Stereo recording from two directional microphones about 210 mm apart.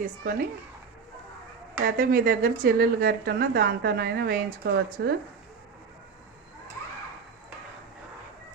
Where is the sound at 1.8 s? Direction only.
45° right (ahead or behind).